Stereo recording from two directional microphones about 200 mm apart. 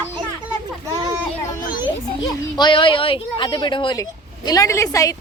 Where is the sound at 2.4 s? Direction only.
20° left (ahead or behind).